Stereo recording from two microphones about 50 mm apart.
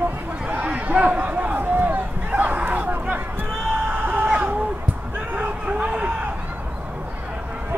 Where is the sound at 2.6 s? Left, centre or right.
Right.